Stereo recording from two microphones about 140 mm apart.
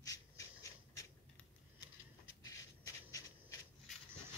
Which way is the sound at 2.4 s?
25° left (ahead or behind).